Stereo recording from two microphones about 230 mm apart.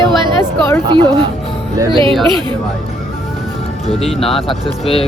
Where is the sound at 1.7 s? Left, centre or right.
Centre.